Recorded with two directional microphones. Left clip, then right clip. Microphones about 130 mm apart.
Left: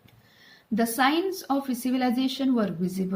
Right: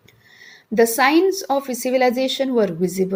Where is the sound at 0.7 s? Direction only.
30° right (ahead or behind).